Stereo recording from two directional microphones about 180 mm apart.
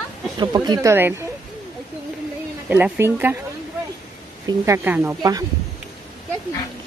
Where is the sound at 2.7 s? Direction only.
10° right (ahead or behind).